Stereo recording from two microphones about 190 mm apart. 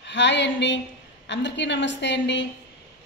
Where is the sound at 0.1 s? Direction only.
70° left (ahead or behind).